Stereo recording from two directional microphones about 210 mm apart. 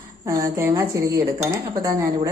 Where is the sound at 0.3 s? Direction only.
15° right (ahead or behind).